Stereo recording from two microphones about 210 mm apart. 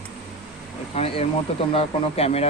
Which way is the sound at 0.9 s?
30° left (ahead or behind).